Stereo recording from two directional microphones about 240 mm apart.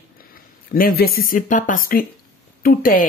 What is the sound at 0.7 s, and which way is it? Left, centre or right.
Speech, left.